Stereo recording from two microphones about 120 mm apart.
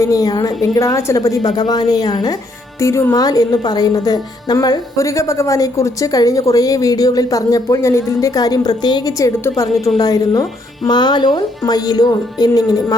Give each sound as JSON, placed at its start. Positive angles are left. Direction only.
{"t": 0.0, "sound": "a woman's voice", "side_deg": 30}